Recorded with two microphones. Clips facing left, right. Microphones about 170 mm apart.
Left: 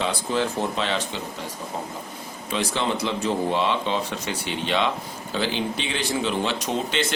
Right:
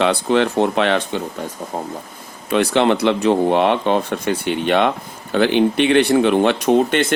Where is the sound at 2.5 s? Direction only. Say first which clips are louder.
Right 10 dB; 65° right (ahead or behind).